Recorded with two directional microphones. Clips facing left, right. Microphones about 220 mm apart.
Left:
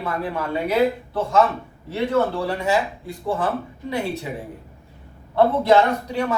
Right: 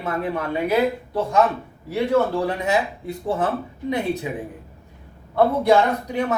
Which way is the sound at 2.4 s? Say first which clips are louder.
Even; 20° right (ahead or behind).